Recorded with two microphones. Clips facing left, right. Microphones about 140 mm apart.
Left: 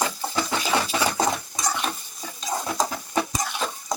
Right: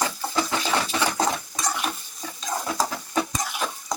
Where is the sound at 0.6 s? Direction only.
10° left (ahead or behind).